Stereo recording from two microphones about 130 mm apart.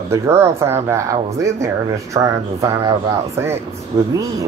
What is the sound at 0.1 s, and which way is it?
Speech, 20° right (ahead or behind).